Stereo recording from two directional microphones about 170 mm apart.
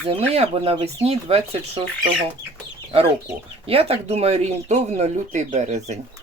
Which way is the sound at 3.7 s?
35° right (ahead or behind).